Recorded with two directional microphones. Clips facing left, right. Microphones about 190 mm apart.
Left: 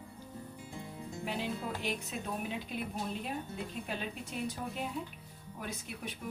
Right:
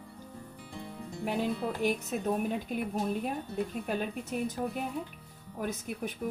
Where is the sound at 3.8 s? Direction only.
50° right (ahead or behind).